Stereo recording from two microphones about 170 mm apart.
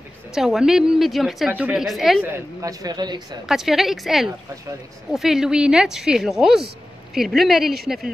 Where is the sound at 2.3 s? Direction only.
20° right (ahead or behind).